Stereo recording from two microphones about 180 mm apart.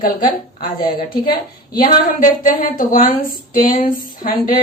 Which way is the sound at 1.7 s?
50° left (ahead or behind).